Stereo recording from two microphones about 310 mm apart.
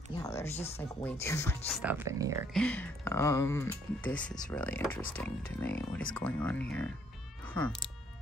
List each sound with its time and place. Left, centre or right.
0.2 s a sound: centre
0.6 s speech: centre
1.2 s speech: centre
1.7 s speech: centre
2.5 s speech: centre